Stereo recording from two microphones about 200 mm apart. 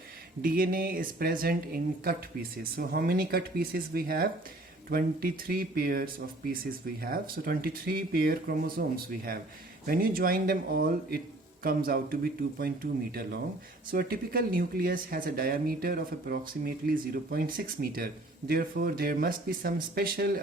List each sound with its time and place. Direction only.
0.4 s speech: 45° right (ahead or behind)